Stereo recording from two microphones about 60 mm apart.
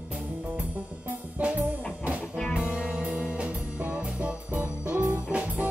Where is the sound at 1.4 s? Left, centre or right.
Right.